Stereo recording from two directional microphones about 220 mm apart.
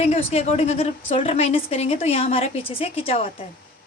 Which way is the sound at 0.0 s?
30° left (ahead or behind).